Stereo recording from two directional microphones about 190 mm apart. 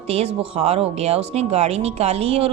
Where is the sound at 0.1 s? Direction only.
30° right (ahead or behind).